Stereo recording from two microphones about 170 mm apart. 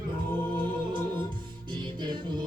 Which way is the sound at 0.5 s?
30° right (ahead or behind).